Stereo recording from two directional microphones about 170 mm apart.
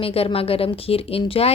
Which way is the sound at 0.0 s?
35° left (ahead or behind).